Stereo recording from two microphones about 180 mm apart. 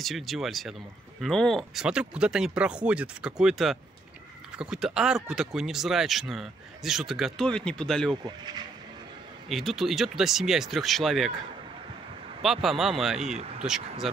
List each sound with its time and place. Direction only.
0.0 s speech: centre (ahead or behind)
9.5 s speech: centre (ahead or behind)
12.4 s speech: centre (ahead or behind)
13.2 s speech: 40° right (ahead or behind)
13.7 s speech: centre (ahead or behind)